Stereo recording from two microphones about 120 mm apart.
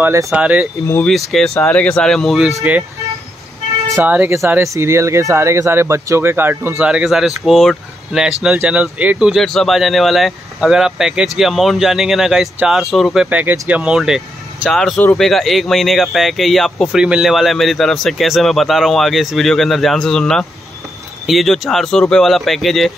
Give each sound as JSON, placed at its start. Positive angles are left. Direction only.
{"t": 0.0, "sound": "speech", "side_deg": -25}
{"t": 0.3, "sound": "speech", "side_deg": -10}
{"t": 1.0, "sound": "speech", "side_deg": 0}
{"t": 4.0, "sound": "speech", "side_deg": -15}
{"t": 6.9, "sound": "speech", "side_deg": -5}
{"t": 13.3, "sound": "speech", "side_deg": -15}